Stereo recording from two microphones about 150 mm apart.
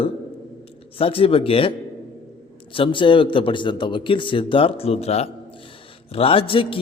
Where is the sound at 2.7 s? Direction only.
35° left (ahead or behind).